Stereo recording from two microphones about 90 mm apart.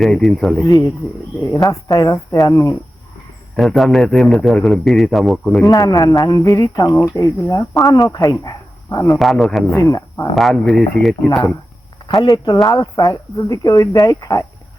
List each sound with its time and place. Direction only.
0.0 s a man's voice: centre (ahead or behind)
0.6 s speech: 35° left (ahead or behind)
3.5 s a man's voice: centre (ahead or behind)
5.7 s speech: 40° left (ahead or behind)
9.1 s a man's voice: centre (ahead or behind)
9.7 s speech: 35° left (ahead or behind)
10.3 s a man's voice: centre (ahead or behind)
11.3 s speech: 35° left (ahead or behind)
12.0 s speech: 50° left (ahead or behind)